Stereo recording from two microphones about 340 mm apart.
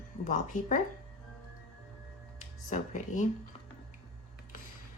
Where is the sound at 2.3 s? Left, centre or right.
Left.